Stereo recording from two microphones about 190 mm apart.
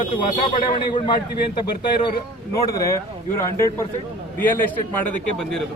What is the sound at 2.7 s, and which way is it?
Speech, 15° left (ahead or behind).